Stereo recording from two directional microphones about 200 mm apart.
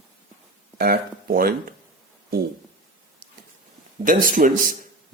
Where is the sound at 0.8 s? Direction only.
50° right (ahead or behind).